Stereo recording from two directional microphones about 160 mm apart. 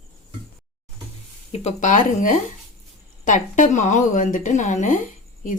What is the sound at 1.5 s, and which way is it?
Speech, 45° left (ahead or behind).